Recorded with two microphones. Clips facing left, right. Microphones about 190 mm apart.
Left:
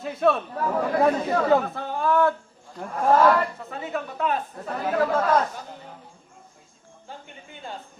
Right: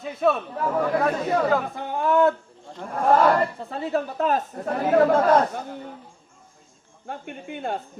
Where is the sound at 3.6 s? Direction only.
35° right (ahead or behind).